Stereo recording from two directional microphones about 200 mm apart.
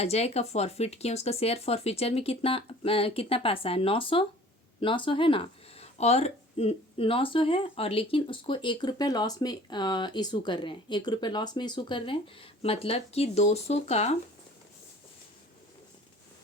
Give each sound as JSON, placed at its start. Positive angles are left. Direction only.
{"t": 0.0, "sound": "speech", "side_deg": 30}